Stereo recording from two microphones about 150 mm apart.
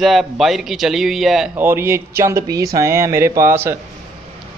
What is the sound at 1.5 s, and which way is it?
Speech, 15° right (ahead or behind).